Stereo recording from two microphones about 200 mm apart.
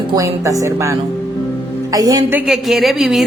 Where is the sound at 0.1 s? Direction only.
15° right (ahead or behind).